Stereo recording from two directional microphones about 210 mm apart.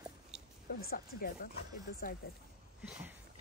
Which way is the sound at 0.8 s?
45° left (ahead or behind).